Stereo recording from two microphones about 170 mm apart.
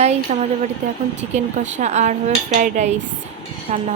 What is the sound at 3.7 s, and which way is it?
Speech, 35° right (ahead or behind).